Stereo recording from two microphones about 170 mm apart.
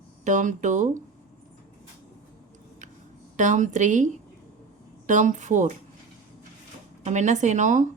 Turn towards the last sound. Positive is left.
turn(degrees=-45)  # may be behind; listen again after turning